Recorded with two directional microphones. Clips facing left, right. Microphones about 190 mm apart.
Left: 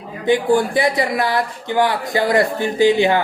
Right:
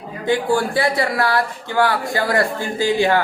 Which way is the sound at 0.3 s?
20° left (ahead or behind).